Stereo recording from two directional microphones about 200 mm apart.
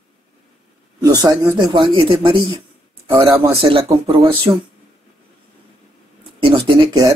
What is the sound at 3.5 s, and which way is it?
A man's voice, 25° right (ahead or behind).